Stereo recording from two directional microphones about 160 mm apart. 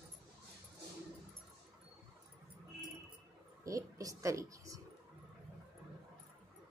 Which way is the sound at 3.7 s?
20° right (ahead or behind).